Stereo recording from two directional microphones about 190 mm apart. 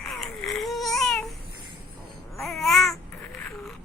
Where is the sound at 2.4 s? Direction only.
Centre (ahead or behind).